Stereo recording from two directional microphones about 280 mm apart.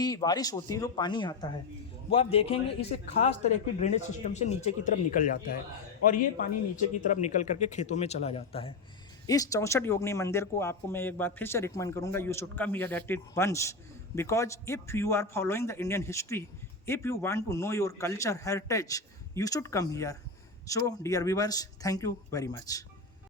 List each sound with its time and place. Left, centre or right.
0.0 s speech: centre